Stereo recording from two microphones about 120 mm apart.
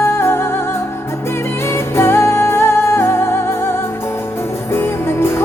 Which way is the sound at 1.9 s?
20° left (ahead or behind).